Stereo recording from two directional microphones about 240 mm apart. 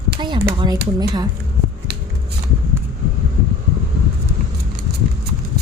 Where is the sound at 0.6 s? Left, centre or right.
Centre.